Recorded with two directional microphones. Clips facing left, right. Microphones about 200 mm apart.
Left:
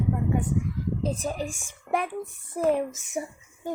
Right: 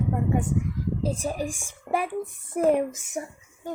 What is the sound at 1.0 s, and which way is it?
Speech, 10° right (ahead or behind).